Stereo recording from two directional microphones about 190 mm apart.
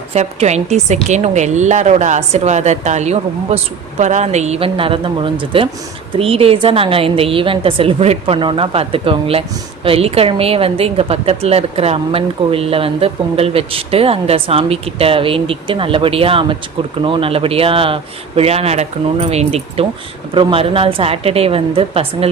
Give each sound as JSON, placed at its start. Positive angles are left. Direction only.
{"t": 0.1, "sound": "a woman's voice", "side_deg": -35}